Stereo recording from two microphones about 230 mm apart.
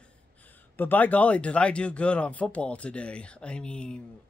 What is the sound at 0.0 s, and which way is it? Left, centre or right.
Speech, centre.